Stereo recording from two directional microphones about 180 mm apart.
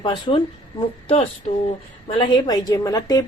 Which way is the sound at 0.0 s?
25° left (ahead or behind).